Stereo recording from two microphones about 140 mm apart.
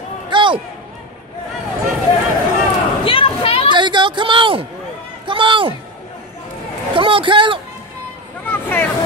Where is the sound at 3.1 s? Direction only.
40° left (ahead or behind).